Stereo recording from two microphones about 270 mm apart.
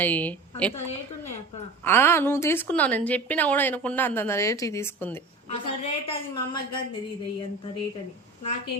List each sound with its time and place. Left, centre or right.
0.0 s a woman's voice: centre
1.8 s a woman's voice: centre
5.5 s a woman's voice: left